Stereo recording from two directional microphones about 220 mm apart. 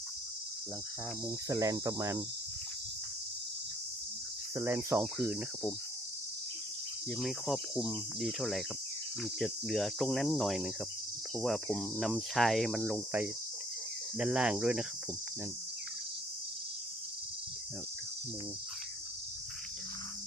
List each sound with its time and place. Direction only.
1.5 s cricket: 15° right (ahead or behind)
4.5 s cricket: 10° right (ahead or behind)
7.1 s cricket: centre (ahead or behind)